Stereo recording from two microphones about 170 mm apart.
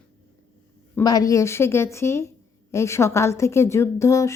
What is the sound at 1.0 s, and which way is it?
A woman's voice, 20° left (ahead or behind).